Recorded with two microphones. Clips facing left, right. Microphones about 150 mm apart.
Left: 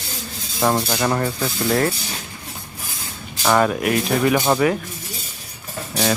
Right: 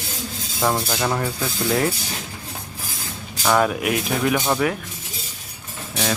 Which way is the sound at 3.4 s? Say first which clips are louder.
Left 2 dB; centre (ahead or behind).